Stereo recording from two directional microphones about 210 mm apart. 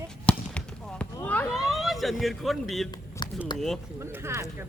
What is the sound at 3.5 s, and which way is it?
Speech, centre (ahead or behind).